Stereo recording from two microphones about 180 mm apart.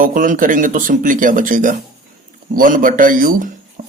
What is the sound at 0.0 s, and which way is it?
A man's voice, 50° right (ahead or behind).